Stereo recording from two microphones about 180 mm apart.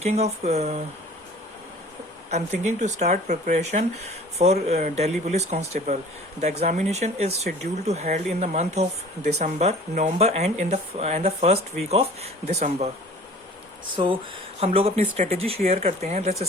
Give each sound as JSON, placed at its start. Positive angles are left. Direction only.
{"t": 0.0, "sound": "speech", "side_deg": -35}
{"t": 2.3, "sound": "speech", "side_deg": -40}
{"t": 13.9, "sound": "speech", "side_deg": -25}